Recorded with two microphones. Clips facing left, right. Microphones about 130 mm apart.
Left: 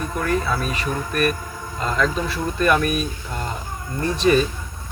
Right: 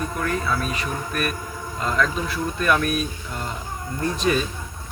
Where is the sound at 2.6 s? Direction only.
Centre (ahead or behind).